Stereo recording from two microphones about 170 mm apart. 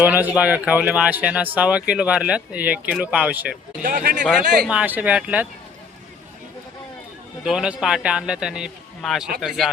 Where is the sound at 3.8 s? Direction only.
60° right (ahead or behind).